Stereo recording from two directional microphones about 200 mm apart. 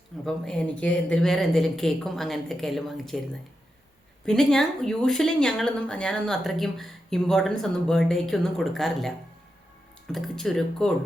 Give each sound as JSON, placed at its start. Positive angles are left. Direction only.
{"t": 0.3, "sound": "speech", "side_deg": 5}
{"t": 4.3, "sound": "speech", "side_deg": 0}